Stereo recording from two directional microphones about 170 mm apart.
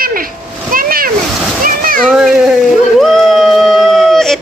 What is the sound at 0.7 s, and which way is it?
Splash, 60° right (ahead or behind).